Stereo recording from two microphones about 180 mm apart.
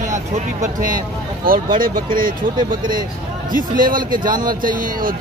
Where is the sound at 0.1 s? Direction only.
45° right (ahead or behind).